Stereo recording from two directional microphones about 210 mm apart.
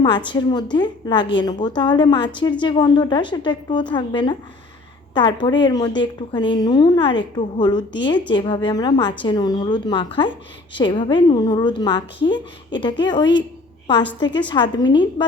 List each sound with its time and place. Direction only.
0.3 s a woman's voice: 20° left (ahead or behind)